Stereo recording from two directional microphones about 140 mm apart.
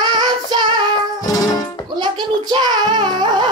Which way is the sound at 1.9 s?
30° right (ahead or behind).